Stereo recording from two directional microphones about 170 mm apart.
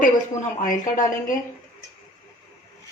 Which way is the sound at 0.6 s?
50° left (ahead or behind).